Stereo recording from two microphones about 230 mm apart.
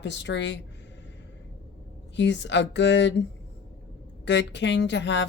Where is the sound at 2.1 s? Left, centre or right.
Left.